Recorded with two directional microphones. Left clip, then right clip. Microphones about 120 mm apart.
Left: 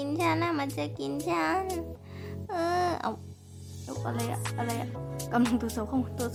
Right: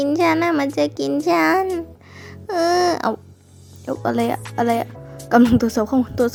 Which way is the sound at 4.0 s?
40° right (ahead or behind).